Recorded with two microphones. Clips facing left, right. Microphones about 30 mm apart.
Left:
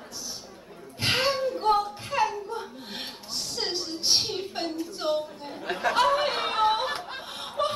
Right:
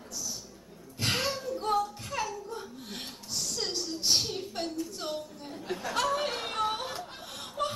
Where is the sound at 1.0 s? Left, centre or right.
Left.